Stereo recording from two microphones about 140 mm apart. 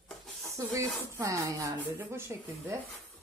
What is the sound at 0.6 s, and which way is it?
Speech, 25° right (ahead or behind).